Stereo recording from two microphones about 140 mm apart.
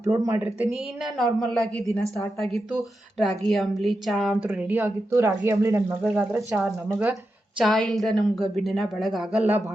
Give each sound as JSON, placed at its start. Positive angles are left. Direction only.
{"t": 0.0, "sound": "speech", "side_deg": -20}
{"t": 0.7, "sound": "a woman's voice", "side_deg": 0}
{"t": 4.4, "sound": "speech", "side_deg": -10}
{"t": 7.6, "sound": "a woman's voice", "side_deg": 0}